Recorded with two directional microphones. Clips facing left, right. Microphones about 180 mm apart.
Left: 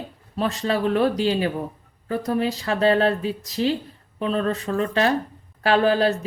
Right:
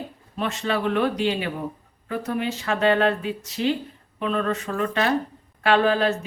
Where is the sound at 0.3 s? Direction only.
35° left (ahead or behind).